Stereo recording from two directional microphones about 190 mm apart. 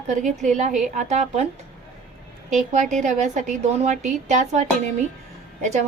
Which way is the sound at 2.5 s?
40° right (ahead or behind).